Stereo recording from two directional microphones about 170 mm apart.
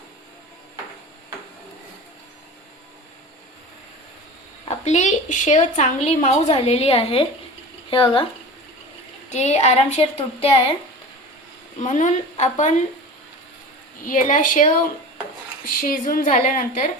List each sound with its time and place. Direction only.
4.7 s a woman's voice: 40° left (ahead or behind)
9.3 s a woman's voice: 40° left (ahead or behind)
11.8 s speech: 45° left (ahead or behind)
14.0 s a woman's voice: 50° left (ahead or behind)